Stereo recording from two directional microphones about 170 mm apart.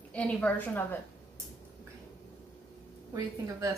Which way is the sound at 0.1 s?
10° left (ahead or behind).